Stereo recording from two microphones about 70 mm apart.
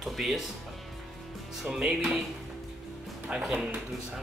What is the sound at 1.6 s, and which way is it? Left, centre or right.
Speech, centre.